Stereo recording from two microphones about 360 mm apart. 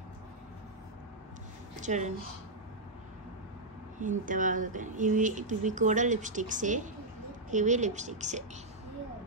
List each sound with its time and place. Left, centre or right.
1.8 s speech: centre
4.0 s speech: right